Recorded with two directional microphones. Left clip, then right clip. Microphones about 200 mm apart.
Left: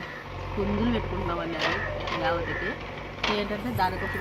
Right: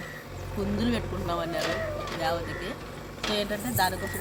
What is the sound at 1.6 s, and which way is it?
Speech, 65° right (ahead or behind).